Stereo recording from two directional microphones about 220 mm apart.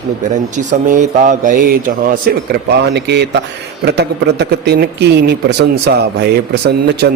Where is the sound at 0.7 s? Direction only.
35° right (ahead or behind).